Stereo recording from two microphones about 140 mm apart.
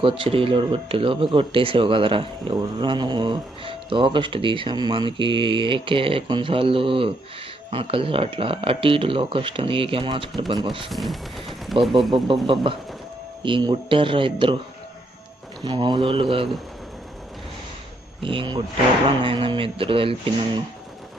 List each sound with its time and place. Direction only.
0.0 s speech: 40° right (ahead or behind)
10.9 s speech: centre (ahead or behind)
13.4 s speech: 35° right (ahead or behind)
15.6 s speech: 35° right (ahead or behind)
18.2 s speech: 40° right (ahead or behind)